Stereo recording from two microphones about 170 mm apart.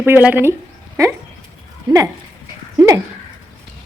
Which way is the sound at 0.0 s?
10° right (ahead or behind).